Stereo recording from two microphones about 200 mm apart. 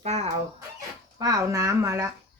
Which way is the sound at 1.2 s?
15° right (ahead or behind).